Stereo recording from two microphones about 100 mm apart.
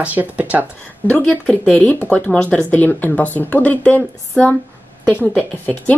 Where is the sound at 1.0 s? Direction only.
15° left (ahead or behind).